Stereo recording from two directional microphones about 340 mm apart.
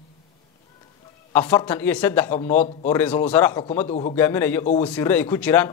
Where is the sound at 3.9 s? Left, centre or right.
Centre.